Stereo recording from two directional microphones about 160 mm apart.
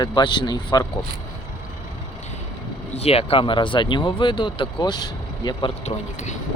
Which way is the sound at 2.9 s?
40° left (ahead or behind).